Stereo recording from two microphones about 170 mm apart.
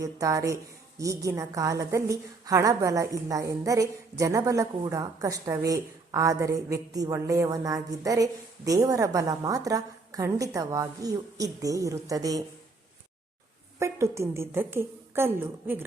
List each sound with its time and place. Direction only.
0.0 s a woman's voice: 20° right (ahead or behind)
13.7 s a woman's voice: 15° right (ahead or behind)